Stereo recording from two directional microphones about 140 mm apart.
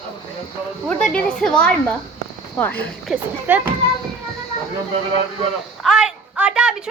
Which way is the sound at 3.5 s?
15° right (ahead or behind).